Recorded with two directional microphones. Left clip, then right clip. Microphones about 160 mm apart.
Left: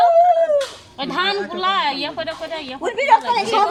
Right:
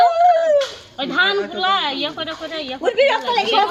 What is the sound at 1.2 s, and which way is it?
A woman's voice, 35° left (ahead or behind).